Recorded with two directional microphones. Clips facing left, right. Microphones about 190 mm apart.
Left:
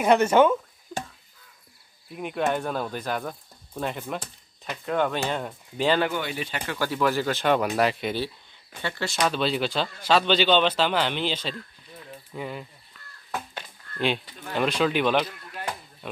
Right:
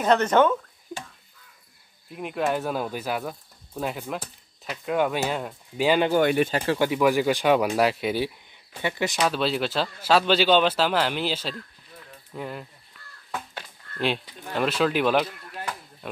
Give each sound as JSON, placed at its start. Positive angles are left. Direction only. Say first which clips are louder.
{"t": 0.0, "sound": "speech", "louder": "left 1 dB", "side_deg": 10}
{"t": 0.9, "sound": "a sound", "louder": "left 3 dB", "side_deg": -15}
{"t": 2.0, "sound": "speech", "louder": "even", "side_deg": 0}
{"t": 6.1, "sound": "speech", "louder": "right 10 dB", "side_deg": -55}
{"t": 6.5, "sound": "speech", "louder": "right 8 dB", "side_deg": -30}
{"t": 6.8, "sound": "speech", "louder": "right 2 dB", "side_deg": -15}
{"t": 9.2, "sound": "speech", "louder": "left 1 dB", "side_deg": -5}
{"t": 13.6, "sound": "a sound", "louder": "right 1 dB", "side_deg": 0}
{"t": 14.5, "sound": "speech", "louder": "even", "side_deg": 0}
{"t": 16.0, "sound": "a sound", "louder": "right 1 dB", "side_deg": 0}